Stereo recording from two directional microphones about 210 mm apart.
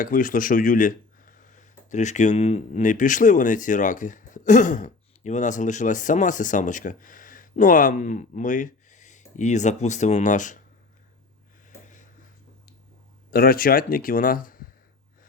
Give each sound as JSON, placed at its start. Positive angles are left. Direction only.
{"t": 0.0, "sound": "speech", "side_deg": 40}
{"t": 13.3, "sound": "speech", "side_deg": 45}